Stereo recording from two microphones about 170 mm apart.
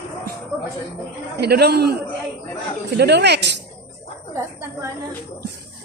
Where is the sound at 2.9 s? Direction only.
80° right.